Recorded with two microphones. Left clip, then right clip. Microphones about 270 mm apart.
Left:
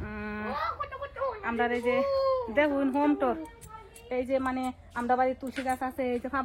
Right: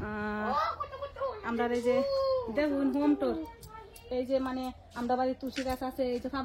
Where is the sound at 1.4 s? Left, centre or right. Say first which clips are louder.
Left 2 dB; centre.